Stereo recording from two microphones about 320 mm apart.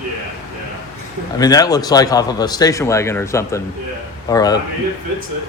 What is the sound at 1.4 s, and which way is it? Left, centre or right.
Speech, centre.